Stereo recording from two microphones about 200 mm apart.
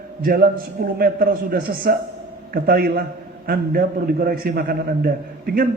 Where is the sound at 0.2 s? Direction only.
50° right (ahead or behind).